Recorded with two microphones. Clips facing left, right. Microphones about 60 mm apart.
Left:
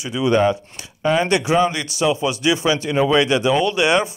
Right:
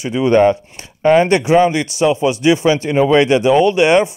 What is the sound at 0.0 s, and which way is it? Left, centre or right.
Speech, right.